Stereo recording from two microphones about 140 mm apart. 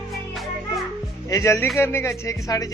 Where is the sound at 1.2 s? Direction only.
20° left (ahead or behind).